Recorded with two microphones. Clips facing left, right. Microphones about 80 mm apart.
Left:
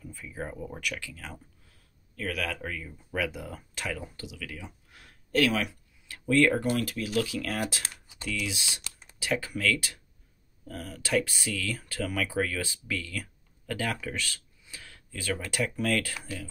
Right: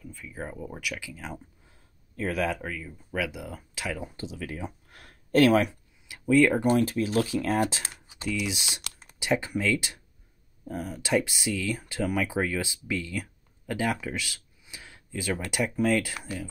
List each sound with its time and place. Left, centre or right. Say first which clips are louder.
0.0 s speech: even; centre; by 2.5 s right
2.6 s speech: right 1 dB; centre
4.3 s speech: right 6 dB; right
4.8 s a sound: right 3 dB; right
6.0 s speech: right 2 dB; centre
6.6 s speech: right 6 dB; right